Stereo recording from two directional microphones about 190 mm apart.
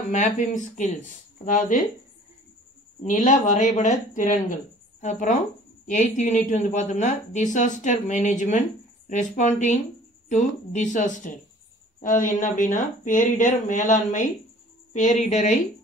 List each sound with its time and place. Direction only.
0.1 s speech: 40° left (ahead or behind)
3.0 s a woman's voice: 40° left (ahead or behind)